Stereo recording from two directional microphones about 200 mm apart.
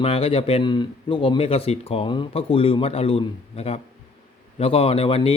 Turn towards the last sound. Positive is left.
turn(degrees=30)  # may be behind; listen again after turning